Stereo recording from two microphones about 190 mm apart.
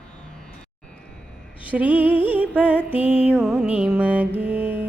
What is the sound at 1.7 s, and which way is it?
Music, 10° right (ahead or behind).